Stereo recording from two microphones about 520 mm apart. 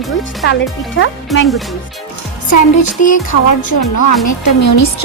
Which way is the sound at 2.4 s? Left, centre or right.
Left.